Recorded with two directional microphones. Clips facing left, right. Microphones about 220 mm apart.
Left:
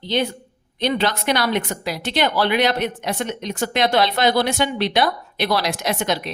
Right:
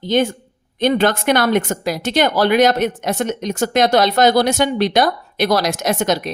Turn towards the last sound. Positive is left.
turn(degrees=-45)  # may be behind; listen again after turning